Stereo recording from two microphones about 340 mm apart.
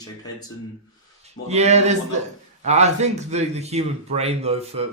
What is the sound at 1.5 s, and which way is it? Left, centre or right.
A man's voice, centre.